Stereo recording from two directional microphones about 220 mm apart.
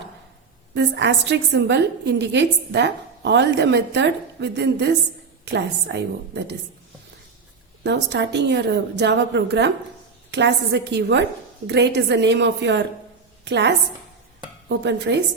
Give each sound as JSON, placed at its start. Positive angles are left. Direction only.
{"t": 0.7, "sound": "a woman's voice", "side_deg": -50}
{"t": 7.9, "sound": "a woman's voice", "side_deg": -50}